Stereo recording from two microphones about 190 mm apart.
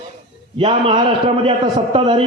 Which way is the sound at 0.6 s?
25° right (ahead or behind).